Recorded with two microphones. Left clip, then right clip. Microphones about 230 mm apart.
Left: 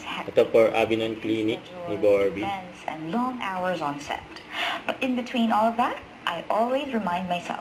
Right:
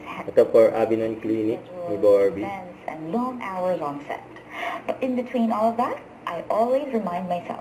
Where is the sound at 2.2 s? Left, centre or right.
Centre.